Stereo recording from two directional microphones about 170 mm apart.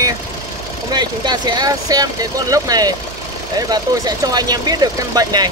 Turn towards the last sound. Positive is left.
turn(degrees=-20)  # may be behind; listen again after turning